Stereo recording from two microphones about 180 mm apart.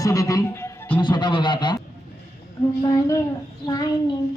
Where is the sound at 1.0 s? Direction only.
25° left (ahead or behind).